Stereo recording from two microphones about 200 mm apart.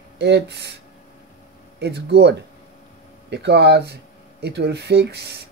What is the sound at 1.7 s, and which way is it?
Speech, 55° right (ahead or behind).